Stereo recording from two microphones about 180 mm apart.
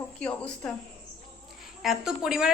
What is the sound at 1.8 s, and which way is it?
Speech, centre (ahead or behind).